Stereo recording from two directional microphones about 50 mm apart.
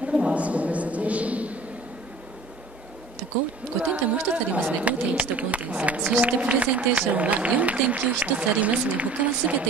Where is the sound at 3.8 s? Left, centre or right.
Right.